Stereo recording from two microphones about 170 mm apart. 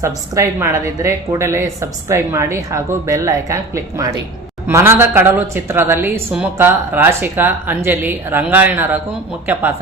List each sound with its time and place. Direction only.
0.0 s a woman's voice: 15° right (ahead or behind)